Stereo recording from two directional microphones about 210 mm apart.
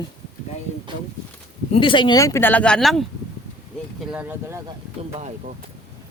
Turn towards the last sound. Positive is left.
turn(degrees=-30)  # may be behind; listen again after turning